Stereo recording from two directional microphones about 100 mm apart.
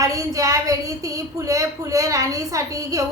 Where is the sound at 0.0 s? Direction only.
35° right (ahead or behind).